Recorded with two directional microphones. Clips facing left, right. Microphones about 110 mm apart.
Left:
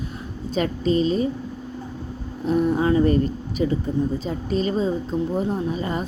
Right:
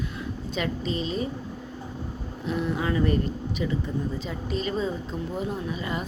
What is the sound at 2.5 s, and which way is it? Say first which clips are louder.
A woman's voice: left 8 dB; 40° left (ahead or behind).